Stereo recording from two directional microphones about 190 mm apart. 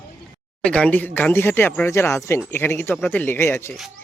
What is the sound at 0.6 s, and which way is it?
Speech, 5° left (ahead or behind).